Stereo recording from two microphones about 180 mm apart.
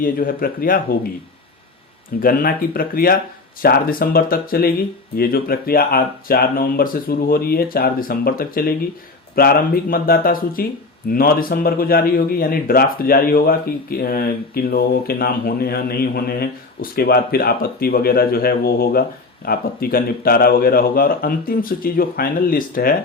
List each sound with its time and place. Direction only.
0.0 s speech: 50° left (ahead or behind)
2.2 s a man's voice: 50° left (ahead or behind)